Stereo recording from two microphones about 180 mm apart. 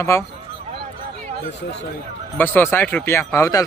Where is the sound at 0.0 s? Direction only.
15° left (ahead or behind).